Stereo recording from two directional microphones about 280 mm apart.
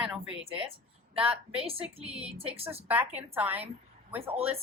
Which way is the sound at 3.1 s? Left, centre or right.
Centre.